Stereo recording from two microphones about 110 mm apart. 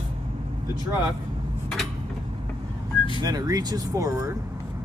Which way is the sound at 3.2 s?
35° right (ahead or behind).